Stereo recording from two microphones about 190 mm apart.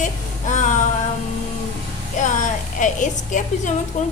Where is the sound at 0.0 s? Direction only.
40° left (ahead or behind).